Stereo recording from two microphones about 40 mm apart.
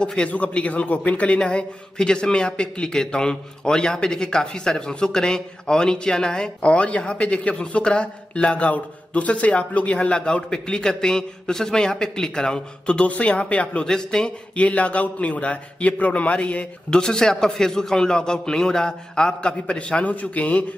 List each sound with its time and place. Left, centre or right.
0.0 s a man's voice: left
0.3 s a man's voice: left
1.4 s a man's voice: left
13.8 s a man's voice: centre
14.6 s a man's voice: left
16.9 s a man's voice: centre; by 20.6 s left